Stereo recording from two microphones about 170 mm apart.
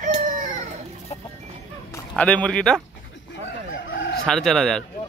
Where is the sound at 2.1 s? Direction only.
5° left (ahead or behind).